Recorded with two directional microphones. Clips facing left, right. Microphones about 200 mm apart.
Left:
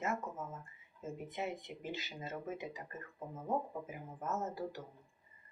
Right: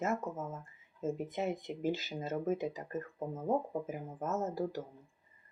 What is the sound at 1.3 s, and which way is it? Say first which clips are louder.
Speech: right 5 dB; 40° right (ahead or behind).